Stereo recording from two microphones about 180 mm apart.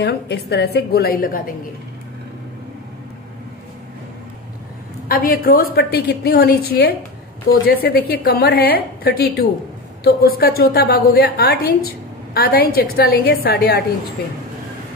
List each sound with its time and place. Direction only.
0.0 s a woman's voice: 70° left (ahead or behind)
5.0 s a woman's voice: 55° left (ahead or behind)